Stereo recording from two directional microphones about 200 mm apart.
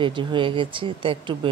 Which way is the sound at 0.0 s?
25° right (ahead or behind).